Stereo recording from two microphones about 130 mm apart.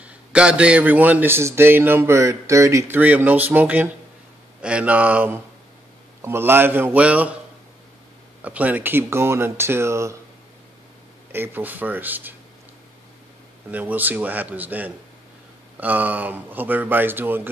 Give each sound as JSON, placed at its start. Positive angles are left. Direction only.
{"t": 0.0, "sound": "a man's voice", "side_deg": -10}
{"t": 8.5, "sound": "speech", "side_deg": -10}
{"t": 11.3, "sound": "a man's voice", "side_deg": -15}
{"t": 13.7, "sound": "a man's voice", "side_deg": -10}